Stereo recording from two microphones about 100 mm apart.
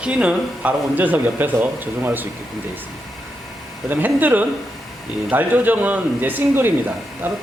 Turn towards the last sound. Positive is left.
turn(degrees=-20)  # may be behind; listen again after turning